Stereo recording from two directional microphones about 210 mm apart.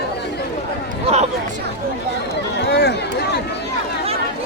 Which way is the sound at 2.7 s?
50° left (ahead or behind).